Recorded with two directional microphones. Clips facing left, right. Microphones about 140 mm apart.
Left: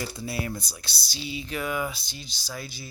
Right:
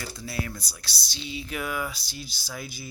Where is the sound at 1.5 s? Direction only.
5° right (ahead or behind).